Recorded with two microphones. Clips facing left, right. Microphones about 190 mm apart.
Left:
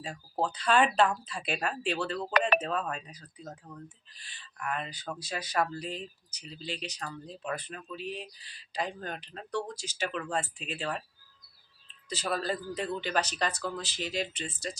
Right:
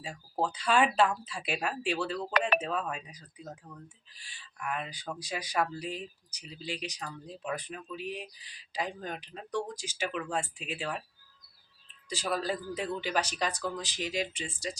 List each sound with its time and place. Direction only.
0.0 s speech: 10° right (ahead or behind)
12.0 s speech: 10° right (ahead or behind)